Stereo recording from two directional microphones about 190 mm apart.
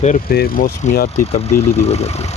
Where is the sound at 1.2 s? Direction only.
35° left (ahead or behind).